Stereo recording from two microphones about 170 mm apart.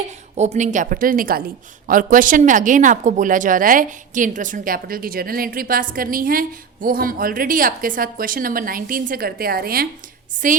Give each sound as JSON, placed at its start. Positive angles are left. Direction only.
{"t": 0.3, "sound": "a woman's voice", "side_deg": -40}